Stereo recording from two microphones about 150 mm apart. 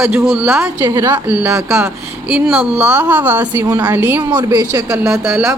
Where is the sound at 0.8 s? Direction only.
20° right (ahead or behind).